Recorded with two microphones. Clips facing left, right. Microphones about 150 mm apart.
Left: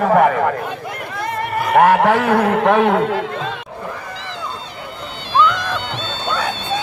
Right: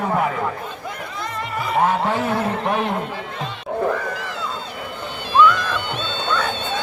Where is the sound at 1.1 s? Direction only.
60° left (ahead or behind).